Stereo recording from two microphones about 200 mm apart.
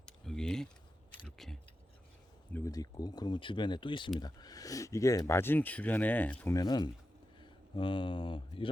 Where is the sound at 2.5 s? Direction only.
15° left (ahead or behind).